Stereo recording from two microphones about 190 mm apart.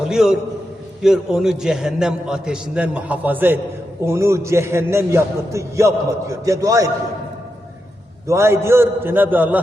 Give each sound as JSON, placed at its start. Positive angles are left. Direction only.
{"t": 0.1, "sound": "a man's voice", "side_deg": -5}
{"t": 8.3, "sound": "a man's voice", "side_deg": -15}